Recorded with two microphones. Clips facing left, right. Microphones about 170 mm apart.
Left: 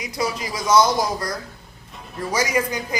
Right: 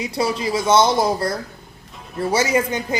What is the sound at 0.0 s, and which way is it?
Speech, 30° right (ahead or behind).